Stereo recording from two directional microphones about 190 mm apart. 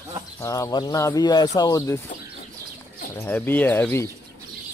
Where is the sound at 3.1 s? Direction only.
10° left (ahead or behind).